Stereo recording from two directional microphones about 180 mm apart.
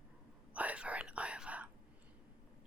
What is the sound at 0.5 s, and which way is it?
Whispering, 10° right (ahead or behind).